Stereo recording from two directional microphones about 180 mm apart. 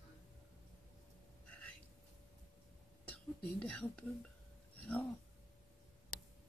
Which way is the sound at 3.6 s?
5° left (ahead or behind).